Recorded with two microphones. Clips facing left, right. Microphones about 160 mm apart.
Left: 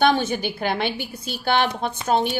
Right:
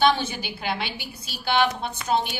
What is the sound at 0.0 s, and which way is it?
A woman's voice, 50° left (ahead or behind).